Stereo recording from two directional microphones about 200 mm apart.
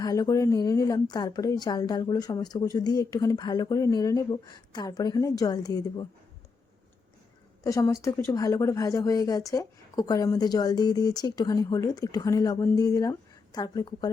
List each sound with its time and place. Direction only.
0.0 s a woman's voice: 20° left (ahead or behind)
7.6 s a woman's voice: 15° left (ahead or behind)